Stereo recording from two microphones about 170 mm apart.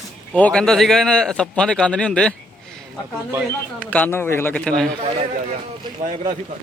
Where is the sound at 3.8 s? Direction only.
10° left (ahead or behind).